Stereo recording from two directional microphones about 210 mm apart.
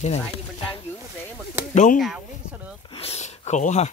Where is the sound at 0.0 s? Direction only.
30° left (ahead or behind).